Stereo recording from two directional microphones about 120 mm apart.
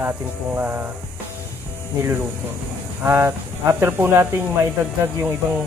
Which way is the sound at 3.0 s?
20° right (ahead or behind).